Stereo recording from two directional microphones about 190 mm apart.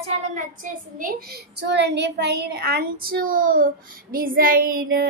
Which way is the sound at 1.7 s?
65° right (ahead or behind).